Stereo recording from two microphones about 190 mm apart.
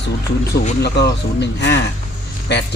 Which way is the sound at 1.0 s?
65° left (ahead or behind).